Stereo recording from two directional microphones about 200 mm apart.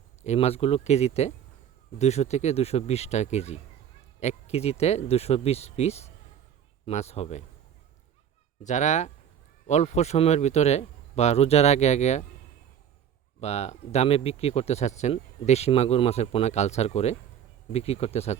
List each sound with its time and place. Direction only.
0.2 s speech: 30° left (ahead or behind)
8.6 s speech: 35° left (ahead or behind)
13.4 s speech: 35° left (ahead or behind)